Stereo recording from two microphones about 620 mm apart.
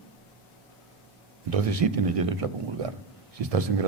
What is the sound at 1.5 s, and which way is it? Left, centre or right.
Speech, right.